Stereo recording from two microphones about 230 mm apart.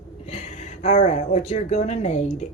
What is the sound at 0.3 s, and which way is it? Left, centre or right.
Speech, left.